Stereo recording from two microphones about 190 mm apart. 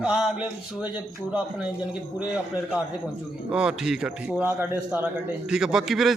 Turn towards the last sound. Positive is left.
turn(degrees=0)  # may be behind; listen again after turning